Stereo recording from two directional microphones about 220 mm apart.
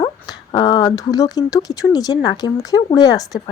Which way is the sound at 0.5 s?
20° left (ahead or behind).